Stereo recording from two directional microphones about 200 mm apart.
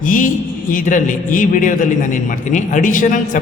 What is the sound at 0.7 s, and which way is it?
A man's voice, 40° left (ahead or behind).